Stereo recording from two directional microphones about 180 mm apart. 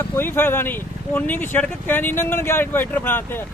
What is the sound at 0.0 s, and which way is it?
Speech, 10° left (ahead or behind).